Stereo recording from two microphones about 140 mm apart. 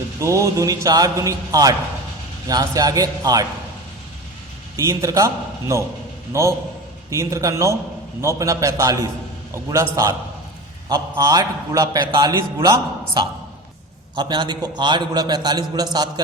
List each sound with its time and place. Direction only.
0.2 s a man's voice: 20° right (ahead or behind)
4.8 s a man's voice: 20° right (ahead or behind)
7.1 s a man's voice: 20° right (ahead or behind)